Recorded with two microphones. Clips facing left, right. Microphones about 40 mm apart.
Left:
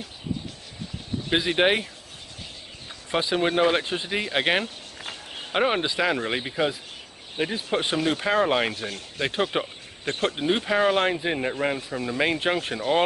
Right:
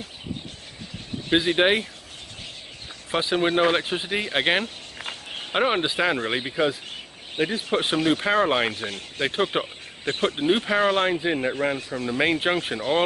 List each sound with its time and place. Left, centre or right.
1.3 s speech: centre
3.1 s speech: centre
5.0 s a sound: centre
5.9 s speech: centre
8.2 s speech: centre
8.7 s speech: right
9.2 s speech: centre
11.1 s speech: centre